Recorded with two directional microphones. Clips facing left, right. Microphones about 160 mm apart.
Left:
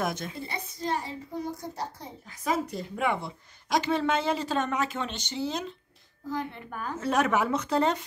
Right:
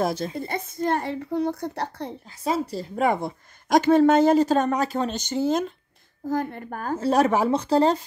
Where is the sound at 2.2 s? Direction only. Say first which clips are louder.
Right 3 dB; 30° right (ahead or behind).